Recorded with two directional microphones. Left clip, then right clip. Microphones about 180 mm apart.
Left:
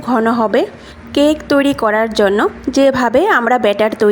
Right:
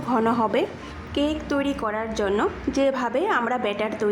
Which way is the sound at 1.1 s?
45° left (ahead or behind).